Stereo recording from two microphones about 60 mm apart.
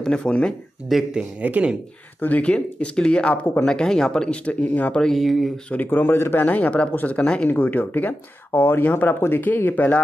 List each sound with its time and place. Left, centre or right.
0.0 s speech: centre
0.9 s speech: centre
1.4 s speech: right
2.1 s speech: left; by 4.4 s centre
4.5 s speech: left
5.0 s speech: centre
5.9 s speech: left
6.4 s speech: left
7.4 s speech: left
8.5 s speech: left